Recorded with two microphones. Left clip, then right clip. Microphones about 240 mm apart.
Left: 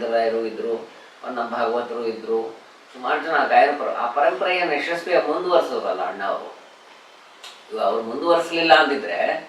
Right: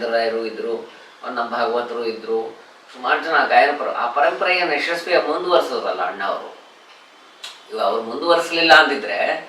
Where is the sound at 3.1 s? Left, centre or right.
Centre.